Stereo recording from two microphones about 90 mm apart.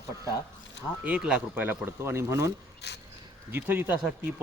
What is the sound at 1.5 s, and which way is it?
Speech, 20° right (ahead or behind).